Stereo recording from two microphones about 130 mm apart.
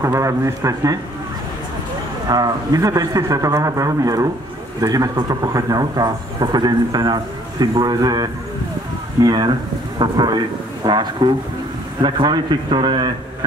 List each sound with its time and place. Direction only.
0.0 s a man's voice: 25° right (ahead or behind)
2.2 s a man's voice: 30° right (ahead or behind)